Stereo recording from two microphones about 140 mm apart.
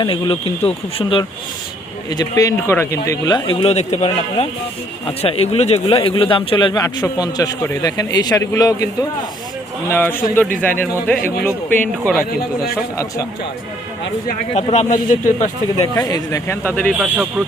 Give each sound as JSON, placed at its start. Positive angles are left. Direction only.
{"t": 0.0, "sound": "speech", "side_deg": 40}
{"t": 2.0, "sound": "speech", "side_deg": 25}
{"t": 9.9, "sound": "speech", "side_deg": 15}
{"t": 14.5, "sound": "speech", "side_deg": 55}
{"t": 16.0, "sound": "speech", "side_deg": 25}